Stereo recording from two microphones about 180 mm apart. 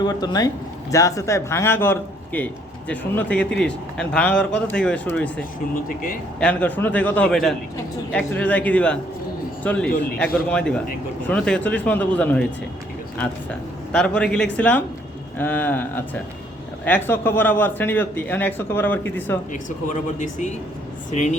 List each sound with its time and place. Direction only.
0.0 s speech: 25° left (ahead or behind)
6.4 s a man's voice: 10° left (ahead or behind)
13.9 s speech: 5° left (ahead or behind)
19.9 s speech: 45° left (ahead or behind)